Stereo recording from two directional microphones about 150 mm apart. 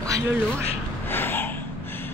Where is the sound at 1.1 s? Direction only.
15° left (ahead or behind).